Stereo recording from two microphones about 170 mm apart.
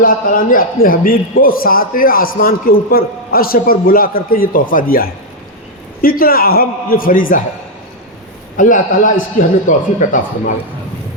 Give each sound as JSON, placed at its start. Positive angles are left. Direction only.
{"t": 0.0, "sound": "a man's voice", "side_deg": 55}
{"t": 8.5, "sound": "speech", "side_deg": 50}